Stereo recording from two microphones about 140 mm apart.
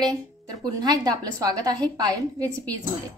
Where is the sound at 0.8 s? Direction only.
30° right (ahead or behind).